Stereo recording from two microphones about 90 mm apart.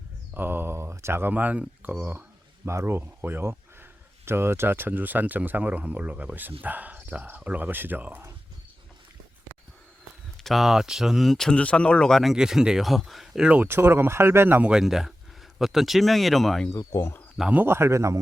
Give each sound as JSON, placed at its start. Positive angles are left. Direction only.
{"t": 0.3, "sound": "a sound", "side_deg": -25}
{"t": 2.6, "sound": "speech", "side_deg": -30}
{"t": 10.4, "sound": "speech", "side_deg": 0}
{"t": 13.5, "sound": "speech", "side_deg": -25}
{"t": 14.7, "sound": "speech", "side_deg": -5}
{"t": 16.7, "sound": "speech", "side_deg": 30}
{"t": 17.5, "sound": "speech", "side_deg": -25}